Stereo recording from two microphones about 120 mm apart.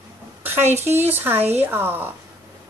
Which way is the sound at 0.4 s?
20° right (ahead or behind).